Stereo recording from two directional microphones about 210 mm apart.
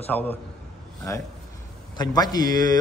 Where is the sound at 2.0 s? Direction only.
20° left (ahead or behind).